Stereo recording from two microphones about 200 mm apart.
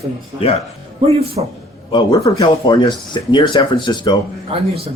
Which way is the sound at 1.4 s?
30° right (ahead or behind).